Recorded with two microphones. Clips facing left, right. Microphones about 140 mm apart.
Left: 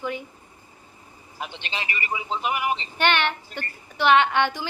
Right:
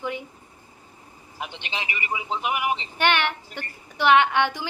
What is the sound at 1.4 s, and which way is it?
A man's voice, 15° right (ahead or behind).